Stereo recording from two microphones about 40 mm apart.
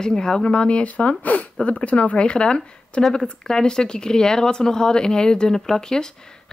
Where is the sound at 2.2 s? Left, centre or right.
Left.